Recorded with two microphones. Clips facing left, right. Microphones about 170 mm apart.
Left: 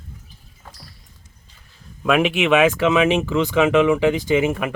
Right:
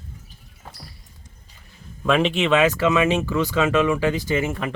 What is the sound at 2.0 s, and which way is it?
Speech, 10° left (ahead or behind).